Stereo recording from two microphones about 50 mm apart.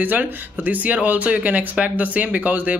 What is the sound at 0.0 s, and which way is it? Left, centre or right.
Speech, right.